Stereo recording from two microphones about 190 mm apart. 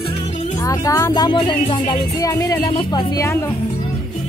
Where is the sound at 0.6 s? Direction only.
15° left (ahead or behind).